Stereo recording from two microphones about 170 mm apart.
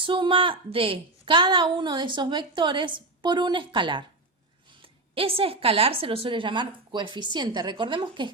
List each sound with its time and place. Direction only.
0.0 s a woman's voice: 30° right (ahead or behind)